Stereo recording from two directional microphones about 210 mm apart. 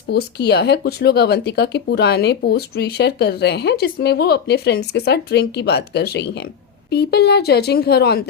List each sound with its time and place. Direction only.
0.1 s speech: 50° left (ahead or behind)